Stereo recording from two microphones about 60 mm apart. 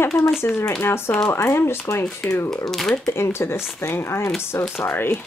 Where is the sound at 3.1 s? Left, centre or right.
Left.